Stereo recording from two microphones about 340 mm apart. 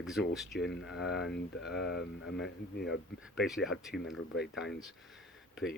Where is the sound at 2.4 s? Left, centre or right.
Left.